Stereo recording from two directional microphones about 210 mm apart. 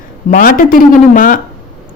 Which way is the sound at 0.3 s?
40° left (ahead or behind).